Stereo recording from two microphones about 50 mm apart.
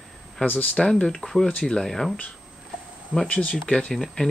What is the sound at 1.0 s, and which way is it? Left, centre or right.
Speech, centre.